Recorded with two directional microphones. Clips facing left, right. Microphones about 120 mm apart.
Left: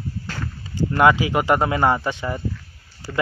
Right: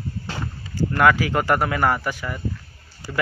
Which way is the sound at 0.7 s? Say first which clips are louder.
Left 1 dB; 20° left (ahead or behind).